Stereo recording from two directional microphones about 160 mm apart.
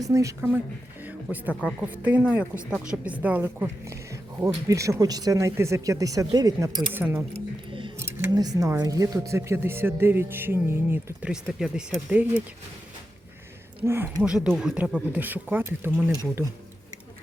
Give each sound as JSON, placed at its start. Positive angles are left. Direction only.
{"t": 0.0, "sound": "speech", "side_deg": -20}
{"t": 1.0, "sound": "a sound", "side_deg": -10}
{"t": 1.8, "sound": "speech", "side_deg": -10}
{"t": 6.9, "sound": "speech", "side_deg": -15}
{"t": 7.3, "sound": "music", "side_deg": -30}
{"t": 7.9, "sound": "speech", "side_deg": -15}
{"t": 13.8, "sound": "speech", "side_deg": -15}